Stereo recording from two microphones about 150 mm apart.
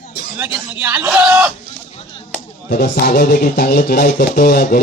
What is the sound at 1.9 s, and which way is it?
Chop, 40° left (ahead or behind).